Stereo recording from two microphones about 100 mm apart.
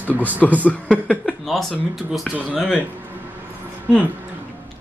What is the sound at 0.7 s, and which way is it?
Speech, 15° left (ahead or behind).